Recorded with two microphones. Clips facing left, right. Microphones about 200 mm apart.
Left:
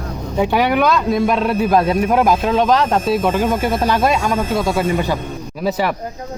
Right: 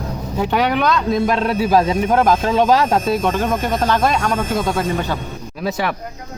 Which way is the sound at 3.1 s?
5° left (ahead or behind).